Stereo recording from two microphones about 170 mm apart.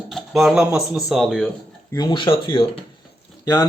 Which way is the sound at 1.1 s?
Centre (ahead or behind).